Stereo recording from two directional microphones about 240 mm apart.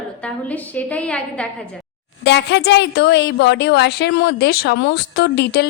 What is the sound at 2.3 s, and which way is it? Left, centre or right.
A woman's voice, left.